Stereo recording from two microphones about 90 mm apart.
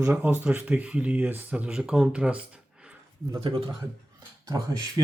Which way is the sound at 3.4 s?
90° right.